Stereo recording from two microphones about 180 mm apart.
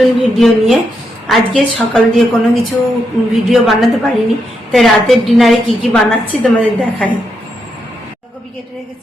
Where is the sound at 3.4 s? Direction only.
Centre (ahead or behind).